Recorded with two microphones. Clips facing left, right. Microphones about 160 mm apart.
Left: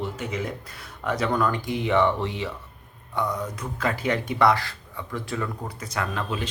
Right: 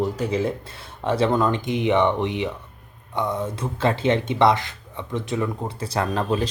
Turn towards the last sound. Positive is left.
turn(degrees=-35)  # may be behind; listen again after turning